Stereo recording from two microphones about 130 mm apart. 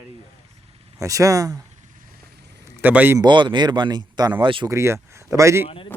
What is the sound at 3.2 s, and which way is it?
Speech, 35° right (ahead or behind).